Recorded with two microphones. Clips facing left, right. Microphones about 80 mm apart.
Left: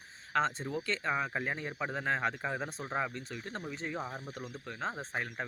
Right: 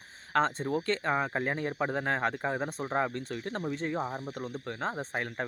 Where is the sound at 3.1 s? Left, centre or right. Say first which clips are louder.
Right 6 dB; right.